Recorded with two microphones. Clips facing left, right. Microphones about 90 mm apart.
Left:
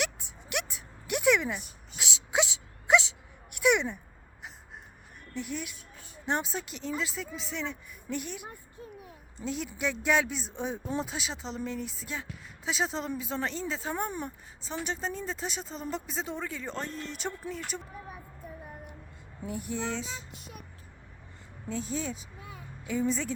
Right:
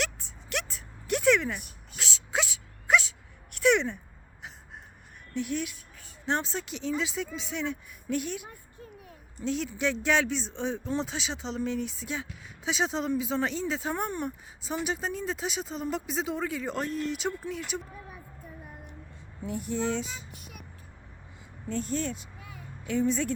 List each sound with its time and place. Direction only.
0.0 s a sound: 10° left (ahead or behind)
3.6 s speech: 10° left (ahead or behind)
5.3 s speech: centre (ahead or behind)
19.5 s speech: centre (ahead or behind)
20.3 s vehicle: 30° left (ahead or behind)
21.7 s speech: centre (ahead or behind)
22.4 s a sound: 25° left (ahead or behind)
22.9 s speech: centre (ahead or behind)